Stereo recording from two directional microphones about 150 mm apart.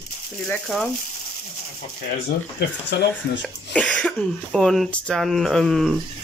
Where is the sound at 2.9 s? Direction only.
90° left.